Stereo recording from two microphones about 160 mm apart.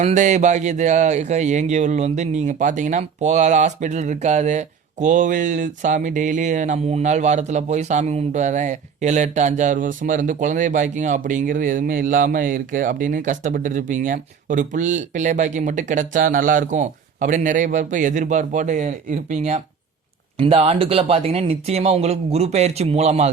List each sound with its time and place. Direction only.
0.0 s speech: 45° right (ahead or behind)